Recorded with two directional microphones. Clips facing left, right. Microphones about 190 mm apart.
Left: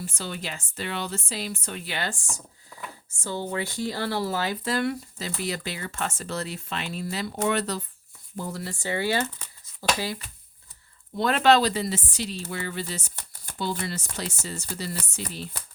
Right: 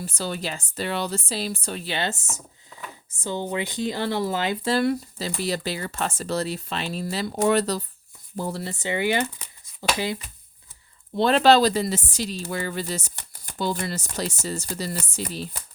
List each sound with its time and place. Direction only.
0.0 s speech: 35° right (ahead or behind)